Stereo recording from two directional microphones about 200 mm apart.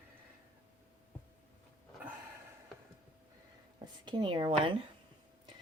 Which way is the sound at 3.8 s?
20° right (ahead or behind).